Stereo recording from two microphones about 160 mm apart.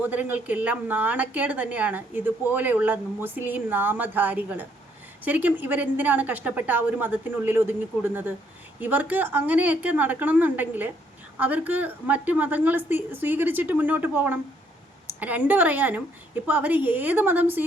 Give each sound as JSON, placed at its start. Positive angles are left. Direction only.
{"t": 0.0, "sound": "a woman's voice", "side_deg": -10}